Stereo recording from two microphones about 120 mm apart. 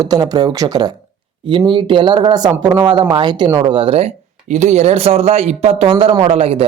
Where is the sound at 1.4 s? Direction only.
45° right (ahead or behind).